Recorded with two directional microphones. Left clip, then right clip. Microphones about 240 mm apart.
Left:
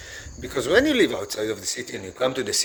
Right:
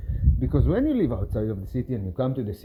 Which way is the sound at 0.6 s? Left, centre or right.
Left.